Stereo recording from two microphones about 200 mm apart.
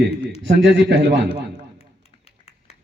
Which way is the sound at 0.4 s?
65° right (ahead or behind).